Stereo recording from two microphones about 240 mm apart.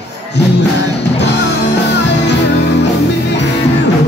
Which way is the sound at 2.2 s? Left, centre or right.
Left.